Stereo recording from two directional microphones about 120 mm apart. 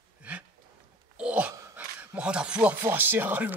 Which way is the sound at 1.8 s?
10° right (ahead or behind).